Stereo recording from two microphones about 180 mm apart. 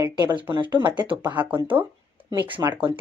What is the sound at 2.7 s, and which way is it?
Speech, 10° right (ahead or behind).